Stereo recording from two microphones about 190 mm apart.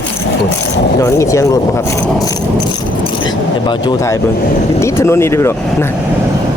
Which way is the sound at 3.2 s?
25° left (ahead or behind).